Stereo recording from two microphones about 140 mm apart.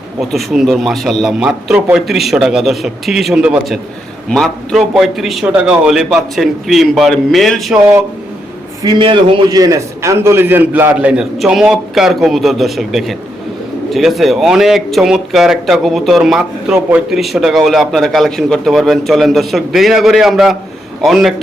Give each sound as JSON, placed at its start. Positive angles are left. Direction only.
{"t": 0.2, "sound": "speech", "side_deg": 0}
{"t": 8.8, "sound": "a man's voice", "side_deg": -30}
{"t": 9.6, "sound": "speech", "side_deg": -25}